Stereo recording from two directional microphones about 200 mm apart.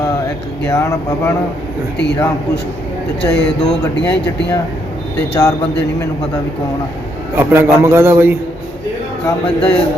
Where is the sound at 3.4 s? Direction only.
5° left (ahead or behind).